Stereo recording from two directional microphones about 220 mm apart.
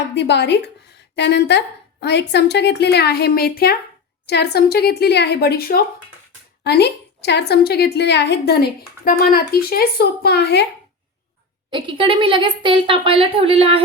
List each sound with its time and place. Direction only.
0.1 s a woman's voice: 50° left (ahead or behind)
11.7 s a woman's voice: 25° right (ahead or behind)